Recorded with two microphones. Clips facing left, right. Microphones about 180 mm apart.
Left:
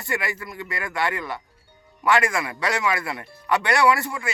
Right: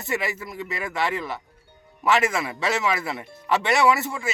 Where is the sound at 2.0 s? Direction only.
25° right (ahead or behind).